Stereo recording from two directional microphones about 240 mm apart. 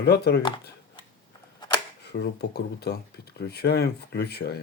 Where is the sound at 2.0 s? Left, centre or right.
Left.